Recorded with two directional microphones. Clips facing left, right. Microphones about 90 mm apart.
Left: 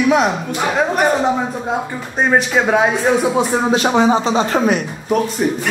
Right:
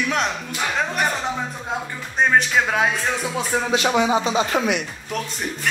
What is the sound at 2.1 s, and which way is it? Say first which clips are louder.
Speech: left 3 dB; 15° left (ahead or behind).